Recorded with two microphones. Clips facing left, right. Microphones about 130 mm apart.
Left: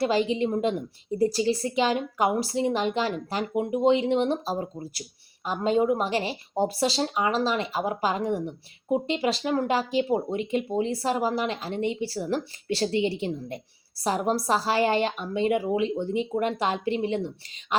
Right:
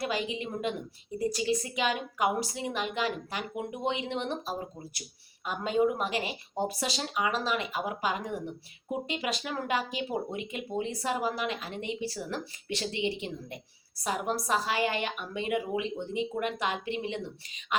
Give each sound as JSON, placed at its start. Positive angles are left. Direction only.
{"t": 0.0, "sound": "speech", "side_deg": 30}